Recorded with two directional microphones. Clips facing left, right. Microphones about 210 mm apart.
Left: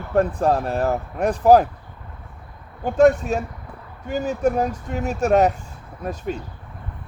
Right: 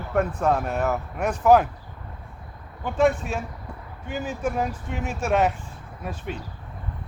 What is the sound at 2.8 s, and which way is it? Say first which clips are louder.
Speech: left 6 dB; 45° left (ahead or behind).